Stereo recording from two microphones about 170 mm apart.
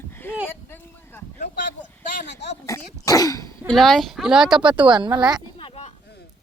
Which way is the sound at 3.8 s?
Centre (ahead or behind).